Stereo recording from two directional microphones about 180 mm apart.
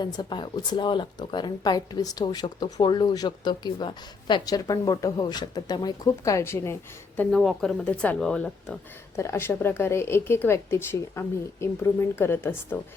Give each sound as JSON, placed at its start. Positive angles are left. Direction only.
{"t": 0.0, "sound": "a woman's voice", "side_deg": 25}
{"t": 9.1, "sound": "a woman's voice", "side_deg": 15}